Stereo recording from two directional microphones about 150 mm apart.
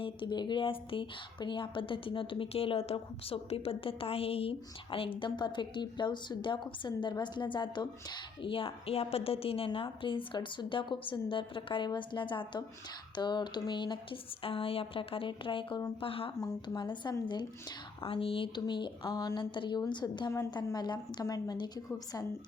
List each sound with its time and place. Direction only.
0.0 s a woman's voice: 30° left (ahead or behind)